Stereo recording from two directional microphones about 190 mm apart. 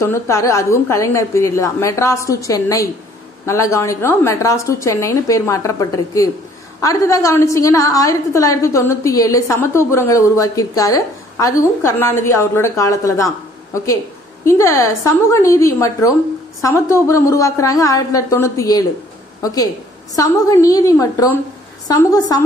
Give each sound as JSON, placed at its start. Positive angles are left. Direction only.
{"t": 0.0, "sound": "a woman's voice", "side_deg": 15}